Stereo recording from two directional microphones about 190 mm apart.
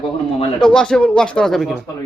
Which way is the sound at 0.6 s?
5° left (ahead or behind).